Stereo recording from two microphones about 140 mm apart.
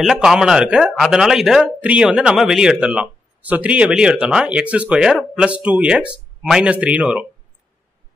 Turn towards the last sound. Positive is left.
turn(degrees=-10)  # may be behind; listen again after turning